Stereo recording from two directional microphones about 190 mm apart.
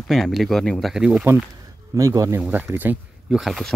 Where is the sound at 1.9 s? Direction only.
15° right (ahead or behind); by 3.7 s centre (ahead or behind).